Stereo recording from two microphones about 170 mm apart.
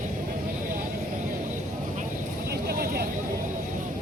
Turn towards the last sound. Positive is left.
turn(degrees=-65)  # may be behind; listen again after turning